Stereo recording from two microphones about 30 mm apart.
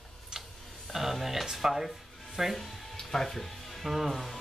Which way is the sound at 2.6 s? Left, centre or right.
Centre.